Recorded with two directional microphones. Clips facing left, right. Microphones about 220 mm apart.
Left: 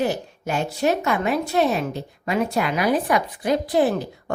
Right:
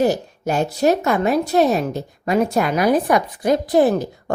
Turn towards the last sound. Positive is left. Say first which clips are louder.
# right 4 dB
turn(degrees=-45)  # may be behind; listen again after turning